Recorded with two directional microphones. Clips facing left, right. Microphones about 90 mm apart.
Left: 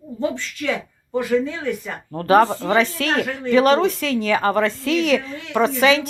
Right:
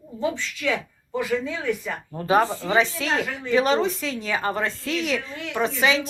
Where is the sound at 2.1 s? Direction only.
60° left (ahead or behind).